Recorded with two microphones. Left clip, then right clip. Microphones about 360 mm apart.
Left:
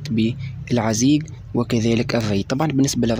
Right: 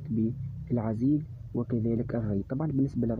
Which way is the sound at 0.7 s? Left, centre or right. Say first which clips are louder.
Left 11 dB; right.